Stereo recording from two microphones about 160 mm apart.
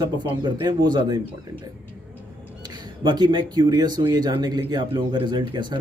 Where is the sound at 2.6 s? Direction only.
30° right (ahead or behind).